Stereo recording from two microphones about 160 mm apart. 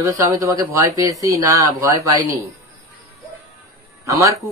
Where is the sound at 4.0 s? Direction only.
20° right (ahead or behind).